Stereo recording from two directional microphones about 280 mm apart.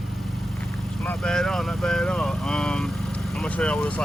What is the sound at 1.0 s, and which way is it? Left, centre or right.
Speech, centre.